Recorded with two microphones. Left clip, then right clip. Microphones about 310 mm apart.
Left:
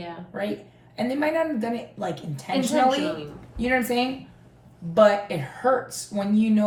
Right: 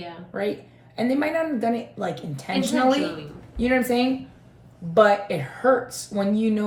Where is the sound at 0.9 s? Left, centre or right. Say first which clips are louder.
Right 1 dB; centre.